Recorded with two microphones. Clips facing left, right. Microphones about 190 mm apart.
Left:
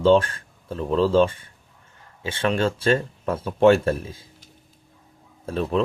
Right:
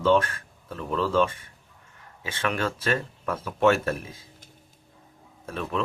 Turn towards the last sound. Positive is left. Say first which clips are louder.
# left 7 dB
turn(degrees=35)  # may be behind; listen again after turning